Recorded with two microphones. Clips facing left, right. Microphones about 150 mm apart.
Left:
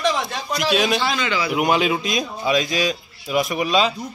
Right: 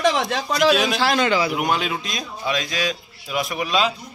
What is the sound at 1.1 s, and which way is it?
Speech, 45° right (ahead or behind).